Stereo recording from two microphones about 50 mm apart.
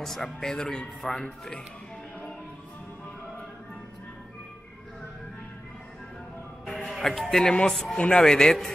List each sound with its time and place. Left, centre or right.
0.0 s speech: centre
6.6 s music: centre
7.9 s speech: centre